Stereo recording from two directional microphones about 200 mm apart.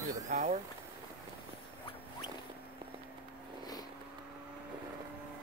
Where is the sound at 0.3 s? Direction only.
35° right (ahead or behind).